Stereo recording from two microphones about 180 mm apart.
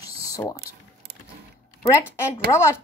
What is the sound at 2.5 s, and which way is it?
Speech, 15° left (ahead or behind).